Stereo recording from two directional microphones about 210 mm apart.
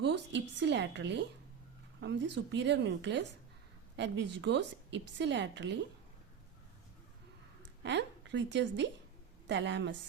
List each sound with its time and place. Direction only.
0.0 s a sound: 60° right (ahead or behind)
2.0 s a woman's voice: 55° right (ahead or behind)
7.9 s a woman's voice: 55° right (ahead or behind)